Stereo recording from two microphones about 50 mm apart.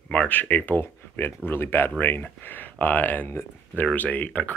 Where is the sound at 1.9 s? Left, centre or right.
Left.